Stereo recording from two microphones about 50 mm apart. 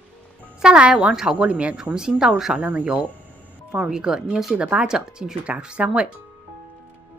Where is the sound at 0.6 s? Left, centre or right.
Right.